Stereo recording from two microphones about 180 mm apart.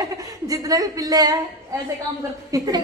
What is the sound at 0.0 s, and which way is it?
A woman's voice, 20° right (ahead or behind).